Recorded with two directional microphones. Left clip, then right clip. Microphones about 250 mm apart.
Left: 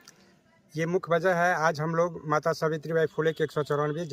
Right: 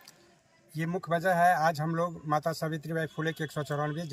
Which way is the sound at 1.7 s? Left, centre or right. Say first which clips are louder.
Left 5 dB; centre.